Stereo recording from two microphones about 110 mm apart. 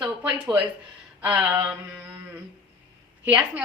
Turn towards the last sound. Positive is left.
turn(degrees=-15)  # may be behind; listen again after turning